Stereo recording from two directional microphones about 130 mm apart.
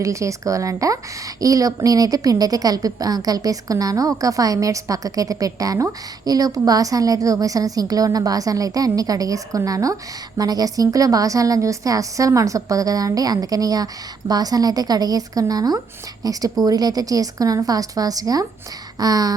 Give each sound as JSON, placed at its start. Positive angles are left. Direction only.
{"t": 0.0, "sound": "a woman's voice", "side_deg": -25}